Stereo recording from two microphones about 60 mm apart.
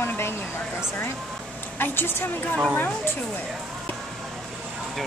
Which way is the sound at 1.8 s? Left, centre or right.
Left.